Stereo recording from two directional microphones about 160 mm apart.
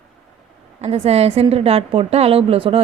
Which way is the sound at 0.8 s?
40° right (ahead or behind).